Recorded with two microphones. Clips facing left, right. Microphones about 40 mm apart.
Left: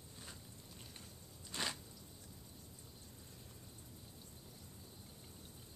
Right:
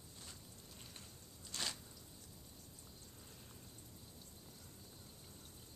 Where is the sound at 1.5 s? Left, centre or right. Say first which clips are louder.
Left 3 dB; centre.